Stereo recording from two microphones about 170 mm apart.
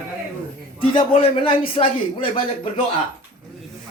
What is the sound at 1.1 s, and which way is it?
A man's voice, 35° left (ahead or behind).